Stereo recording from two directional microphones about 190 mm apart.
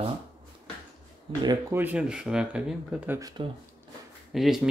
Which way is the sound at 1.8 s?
10° right (ahead or behind).